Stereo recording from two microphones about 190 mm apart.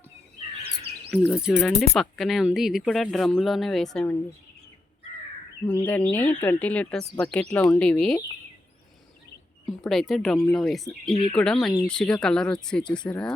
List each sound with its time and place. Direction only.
1.1 s speech: 5° right (ahead or behind)
5.8 s speech: 10° left (ahead or behind)
9.6 s speech: centre (ahead or behind)
11.1 s speech: 30° left (ahead or behind)
11.3 s speech: 5° left (ahead or behind)